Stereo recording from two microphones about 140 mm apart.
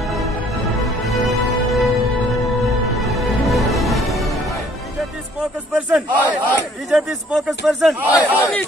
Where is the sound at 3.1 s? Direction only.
Centre (ahead or behind).